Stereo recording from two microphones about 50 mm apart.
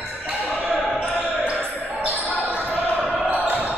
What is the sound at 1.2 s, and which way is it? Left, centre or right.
Basketball bounce, right.